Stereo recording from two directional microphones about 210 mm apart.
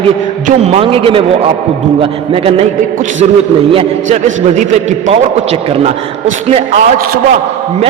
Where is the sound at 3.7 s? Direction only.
30° right (ahead or behind).